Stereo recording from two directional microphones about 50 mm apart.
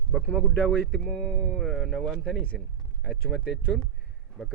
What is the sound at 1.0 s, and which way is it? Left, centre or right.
Speech, centre.